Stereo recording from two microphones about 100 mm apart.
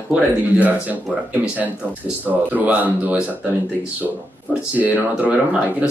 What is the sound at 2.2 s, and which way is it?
Speech, 15° right (ahead or behind).